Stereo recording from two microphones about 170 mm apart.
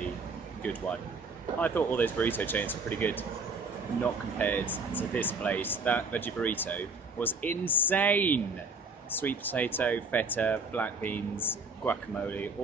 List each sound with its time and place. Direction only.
0.6 s speech: 5° left (ahead or behind)